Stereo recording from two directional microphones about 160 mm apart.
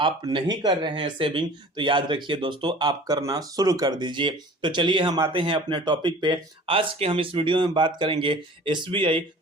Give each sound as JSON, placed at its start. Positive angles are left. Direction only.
{"t": 0.0, "sound": "speech", "side_deg": -30}